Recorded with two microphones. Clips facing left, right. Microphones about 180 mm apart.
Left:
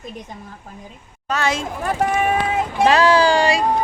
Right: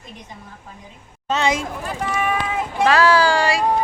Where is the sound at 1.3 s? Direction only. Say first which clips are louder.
Right 1 dB; 20° right (ahead or behind).